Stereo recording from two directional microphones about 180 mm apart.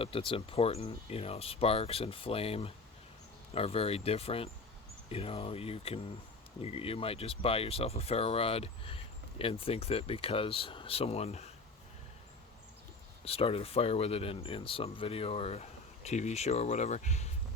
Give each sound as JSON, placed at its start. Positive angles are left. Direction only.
{"t": 0.0, "sound": "speech", "side_deg": 30}
{"t": 13.2, "sound": "speech", "side_deg": 30}